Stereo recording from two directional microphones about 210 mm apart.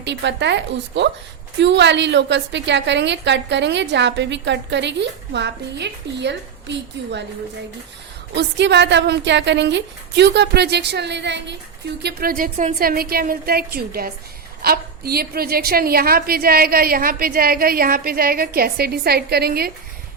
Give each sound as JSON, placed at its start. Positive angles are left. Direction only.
{"t": 0.0, "sound": "a woman's voice", "side_deg": -55}
{"t": 8.3, "sound": "a woman's voice", "side_deg": -55}
{"t": 12.0, "sound": "a woman's voice", "side_deg": -45}